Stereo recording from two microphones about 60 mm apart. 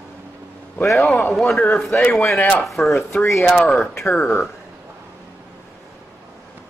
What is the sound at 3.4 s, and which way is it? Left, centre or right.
Speech, centre.